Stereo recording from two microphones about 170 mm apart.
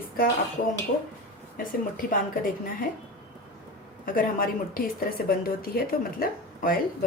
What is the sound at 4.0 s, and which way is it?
A woman's voice, 55° left (ahead or behind).